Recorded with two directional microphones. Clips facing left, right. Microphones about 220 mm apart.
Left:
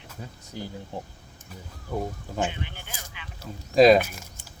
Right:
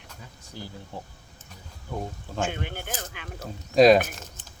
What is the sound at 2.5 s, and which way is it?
Speech, 50° right (ahead or behind).